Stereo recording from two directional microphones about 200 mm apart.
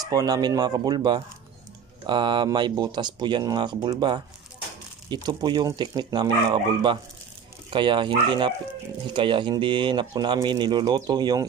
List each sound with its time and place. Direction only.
0.0 s speech: 20° right (ahead or behind)